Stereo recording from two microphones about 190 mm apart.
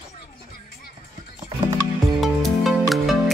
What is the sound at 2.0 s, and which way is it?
Music, centre (ahead or behind).